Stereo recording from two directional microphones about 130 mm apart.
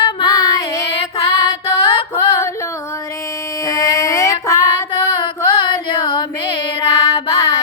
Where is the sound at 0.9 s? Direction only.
45° left (ahead or behind).